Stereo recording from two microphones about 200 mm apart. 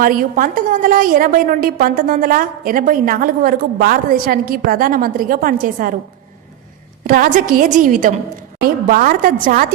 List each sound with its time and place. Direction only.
0.0 s a woman's voice: 45° right (ahead or behind)
7.1 s a woman's voice: 45° right (ahead or behind)